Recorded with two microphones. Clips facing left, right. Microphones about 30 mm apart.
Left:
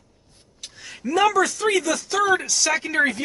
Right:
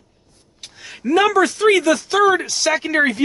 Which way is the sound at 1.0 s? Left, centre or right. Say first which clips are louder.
Right 4 dB; right.